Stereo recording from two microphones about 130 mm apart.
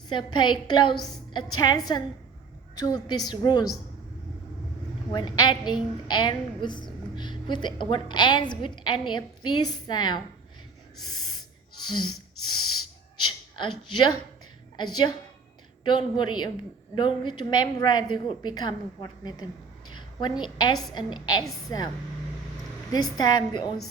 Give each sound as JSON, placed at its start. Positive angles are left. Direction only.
{"t": 0.1, "sound": "a woman's voice", "side_deg": 35}
{"t": 5.1, "sound": "a woman's voice", "side_deg": 35}
{"t": 13.6, "sound": "a woman's voice", "side_deg": 35}
{"t": 22.9, "sound": "a woman's voice", "side_deg": 30}